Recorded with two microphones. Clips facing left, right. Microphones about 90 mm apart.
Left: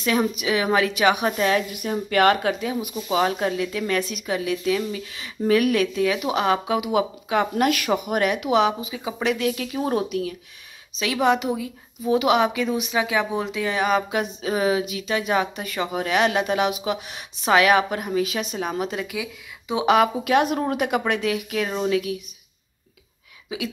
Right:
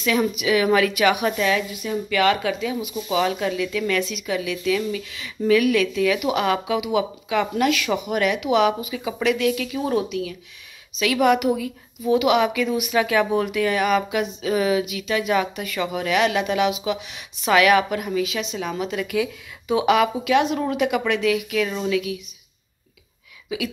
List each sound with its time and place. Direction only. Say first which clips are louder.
0.0 s speech: right 1 dB; 35° left (ahead or behind)
1.7 s a woman's voice: even; 50° left (ahead or behind); by 12.9 s 35° left (ahead or behind)
12.9 s speech: right 6 dB; 20° left (ahead or behind); by 22.2 s 35° left (ahead or behind)
23.5 s speech: right 3 dB; 35° left (ahead or behind)